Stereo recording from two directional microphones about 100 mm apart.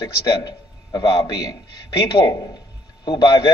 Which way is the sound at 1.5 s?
40° left (ahead or behind).